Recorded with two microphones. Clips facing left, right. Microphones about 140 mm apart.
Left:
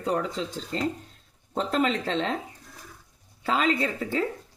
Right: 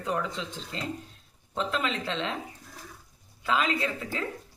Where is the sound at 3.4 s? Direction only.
35° left (ahead or behind).